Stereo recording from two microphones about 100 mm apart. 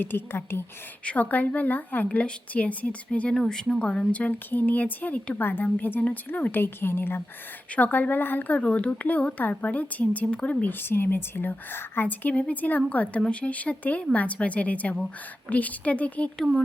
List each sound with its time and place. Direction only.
0.0 s a woman's voice: 20° left (ahead or behind)